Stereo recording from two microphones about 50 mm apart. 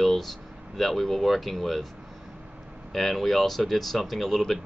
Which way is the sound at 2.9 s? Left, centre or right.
Centre.